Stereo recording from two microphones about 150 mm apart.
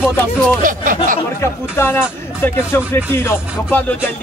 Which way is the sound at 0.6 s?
65° right (ahead or behind).